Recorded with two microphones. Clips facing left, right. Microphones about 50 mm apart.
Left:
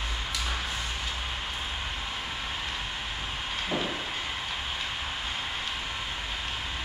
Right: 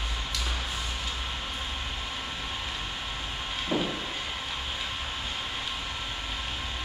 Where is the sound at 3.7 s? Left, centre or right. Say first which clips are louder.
Right 3 dB; centre.